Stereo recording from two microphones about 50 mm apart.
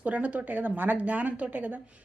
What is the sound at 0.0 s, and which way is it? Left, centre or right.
Speech, right.